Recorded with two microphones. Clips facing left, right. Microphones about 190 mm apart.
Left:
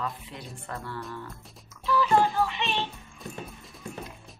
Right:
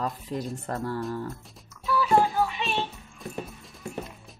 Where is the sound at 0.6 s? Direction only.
40° right (ahead or behind).